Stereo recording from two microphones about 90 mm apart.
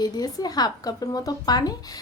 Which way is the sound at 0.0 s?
45° left (ahead or behind).